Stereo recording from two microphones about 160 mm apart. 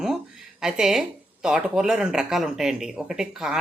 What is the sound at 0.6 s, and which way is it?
Speech, 5° right (ahead or behind).